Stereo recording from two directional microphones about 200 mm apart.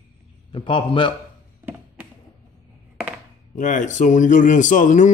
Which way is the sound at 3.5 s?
40° left (ahead or behind).